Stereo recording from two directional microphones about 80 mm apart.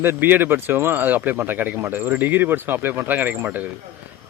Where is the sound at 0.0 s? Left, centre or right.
Right.